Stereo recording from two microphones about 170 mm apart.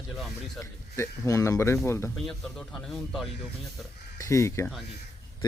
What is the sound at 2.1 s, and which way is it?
Speech, centre (ahead or behind).